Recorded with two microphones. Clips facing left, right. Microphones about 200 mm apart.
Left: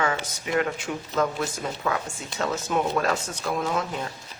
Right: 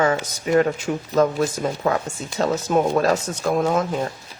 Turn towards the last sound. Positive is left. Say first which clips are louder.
# right 7 dB
turn(degrees=-45)  # may be behind; listen again after turning